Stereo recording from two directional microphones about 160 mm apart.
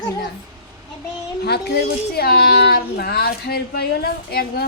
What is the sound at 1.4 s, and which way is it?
A woman's voice, 90° left.